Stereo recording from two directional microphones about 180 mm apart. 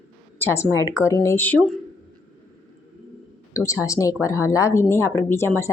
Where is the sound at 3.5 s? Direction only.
20° left (ahead or behind).